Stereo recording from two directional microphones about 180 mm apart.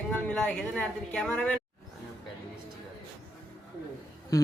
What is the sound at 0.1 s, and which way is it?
A woman's voice, 5° left (ahead or behind).